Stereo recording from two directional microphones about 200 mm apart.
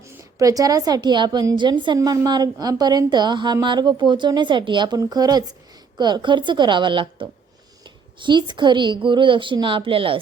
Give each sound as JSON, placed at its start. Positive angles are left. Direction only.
{"t": 0.0, "sound": "a woman's voice", "side_deg": -15}